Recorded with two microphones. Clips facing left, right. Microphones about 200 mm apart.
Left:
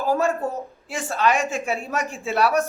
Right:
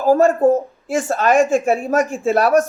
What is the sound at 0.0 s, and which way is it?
A woman's voice, 40° right (ahead or behind).